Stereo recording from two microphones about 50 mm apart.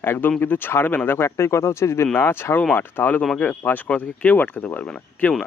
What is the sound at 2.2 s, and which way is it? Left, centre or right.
Speech, left.